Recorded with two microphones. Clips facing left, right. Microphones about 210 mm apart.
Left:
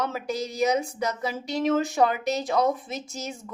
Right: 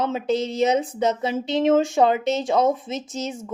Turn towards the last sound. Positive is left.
turn(degrees=-30)  # may be behind; listen again after turning